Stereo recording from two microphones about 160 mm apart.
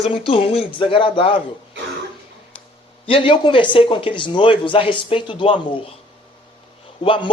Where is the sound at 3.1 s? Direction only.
35° left (ahead or behind).